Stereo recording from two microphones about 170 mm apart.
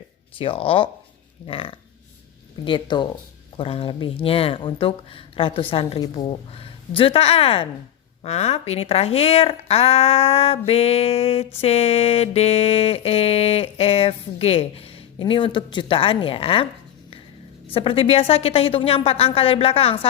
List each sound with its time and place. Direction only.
0.3 s music: 30° left (ahead or behind)
2.6 s speech: 30° left (ahead or behind)
3.6 s music: 35° left (ahead or behind)
17.7 s music: 30° left (ahead or behind)